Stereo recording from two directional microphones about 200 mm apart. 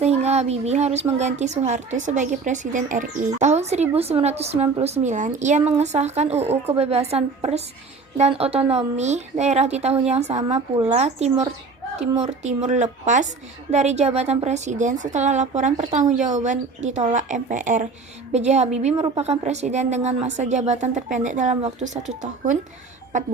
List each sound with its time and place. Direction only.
0.0 s speech: 30° right (ahead or behind)